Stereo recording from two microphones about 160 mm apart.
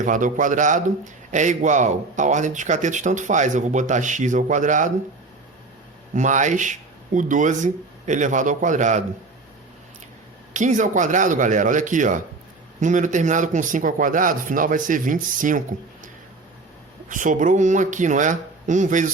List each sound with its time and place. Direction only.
0.0 s a man's voice: 55° right (ahead or behind)
6.1 s a man's voice: 50° right (ahead or behind)
10.5 s a man's voice: 50° right (ahead or behind)
17.1 s a man's voice: 55° right (ahead or behind)